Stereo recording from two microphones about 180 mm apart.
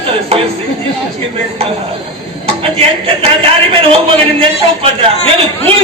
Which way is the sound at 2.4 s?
30° right (ahead or behind).